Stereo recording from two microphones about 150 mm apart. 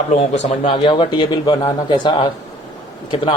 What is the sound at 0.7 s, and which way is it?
A man's voice, 30° left (ahead or behind).